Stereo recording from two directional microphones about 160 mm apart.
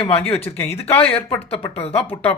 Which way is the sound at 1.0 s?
35° left (ahead or behind).